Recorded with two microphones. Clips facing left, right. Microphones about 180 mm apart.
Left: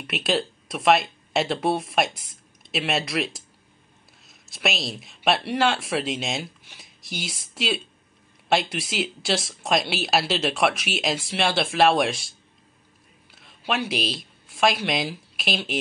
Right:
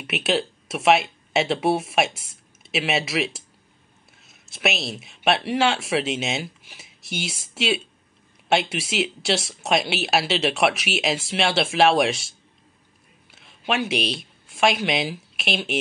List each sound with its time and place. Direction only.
0.0 s speech: centre (ahead or behind)